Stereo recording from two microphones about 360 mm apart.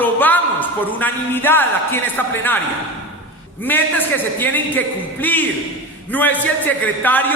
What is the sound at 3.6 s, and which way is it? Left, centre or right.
A man's voice, centre.